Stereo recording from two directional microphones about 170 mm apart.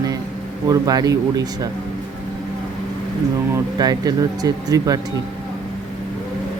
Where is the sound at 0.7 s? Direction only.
20° right (ahead or behind).